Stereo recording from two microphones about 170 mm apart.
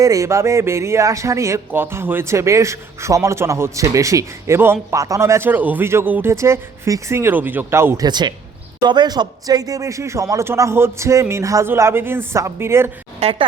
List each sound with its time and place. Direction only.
0.0 s speech: 20° right (ahead or behind)
13.1 s speech: 35° right (ahead or behind)